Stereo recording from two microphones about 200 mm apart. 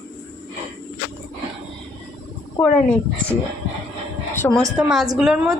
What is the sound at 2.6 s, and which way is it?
Speech, 15° left (ahead or behind).